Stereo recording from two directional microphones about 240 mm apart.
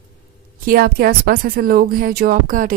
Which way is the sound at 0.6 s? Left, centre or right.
Right.